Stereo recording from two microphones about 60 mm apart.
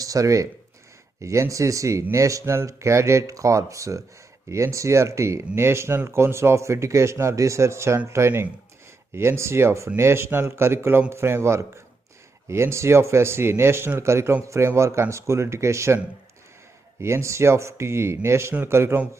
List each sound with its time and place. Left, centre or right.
0.0 s speech: right
1.2 s speech: right
17.0 s speech: right